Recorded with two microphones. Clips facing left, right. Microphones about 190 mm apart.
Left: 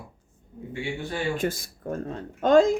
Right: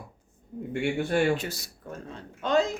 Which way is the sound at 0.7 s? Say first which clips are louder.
Right 5 dB; 60° right (ahead or behind).